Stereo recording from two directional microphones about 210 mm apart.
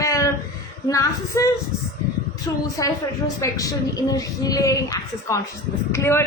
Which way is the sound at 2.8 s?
15° left (ahead or behind).